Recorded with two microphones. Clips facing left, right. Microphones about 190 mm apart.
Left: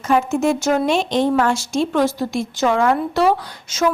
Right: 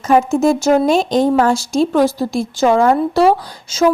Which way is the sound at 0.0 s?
40° right (ahead or behind).